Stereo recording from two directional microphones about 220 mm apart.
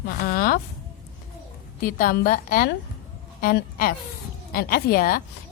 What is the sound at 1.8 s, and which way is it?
A woman's voice, 40° left (ahead or behind).